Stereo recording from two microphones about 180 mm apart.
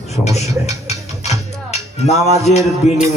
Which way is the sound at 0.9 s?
35° left (ahead or behind).